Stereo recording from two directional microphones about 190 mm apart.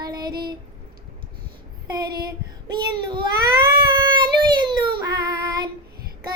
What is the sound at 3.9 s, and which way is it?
Speech, 25° right (ahead or behind).